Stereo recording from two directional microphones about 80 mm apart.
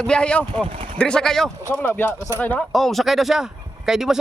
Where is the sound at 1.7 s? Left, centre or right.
Left.